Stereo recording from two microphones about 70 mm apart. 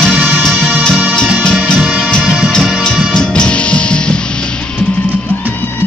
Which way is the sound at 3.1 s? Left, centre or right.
Centre.